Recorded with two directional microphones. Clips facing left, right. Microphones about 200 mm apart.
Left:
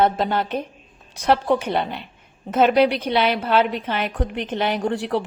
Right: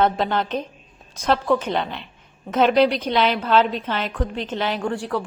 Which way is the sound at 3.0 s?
10° left (ahead or behind).